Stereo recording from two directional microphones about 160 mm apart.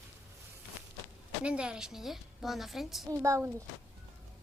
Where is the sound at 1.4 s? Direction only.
5° right (ahead or behind).